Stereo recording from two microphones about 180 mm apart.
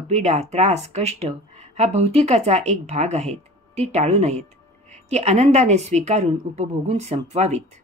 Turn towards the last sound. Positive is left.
turn(degrees=-40)  # may be behind; listen again after turning